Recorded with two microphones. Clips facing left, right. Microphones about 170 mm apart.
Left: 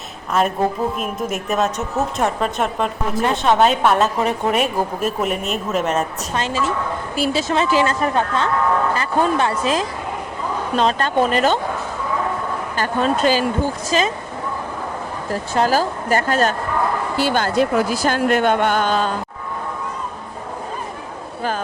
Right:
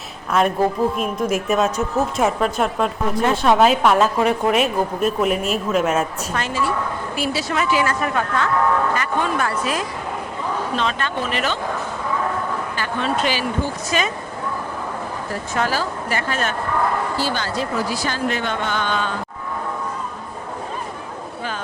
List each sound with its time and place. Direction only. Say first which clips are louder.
0.3 s a woman's voice: right 1 dB; centre (ahead or behind)
6.3 s a woman's voice: left 2 dB; 20° left (ahead or behind)
9.0 s speech: left 3 dB; 40° left (ahead or behind)
9.4 s a woman's voice: left 3 dB; 25° left (ahead or behind)
10.8 s speech: left 11 dB; 40° left (ahead or behind)
12.7 s speech: left 6 dB; 40° left (ahead or behind)
13.9 s speech: left 3 dB; 30° left (ahead or behind)
15.5 s speech: left 5 dB; 40° left (ahead or behind)
17.2 s speech: left 6 dB; 55° left (ahead or behind); by 19.1 s 40° left (ahead or behind)